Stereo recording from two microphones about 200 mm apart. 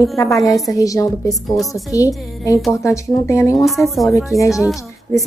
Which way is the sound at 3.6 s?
Centre (ahead or behind).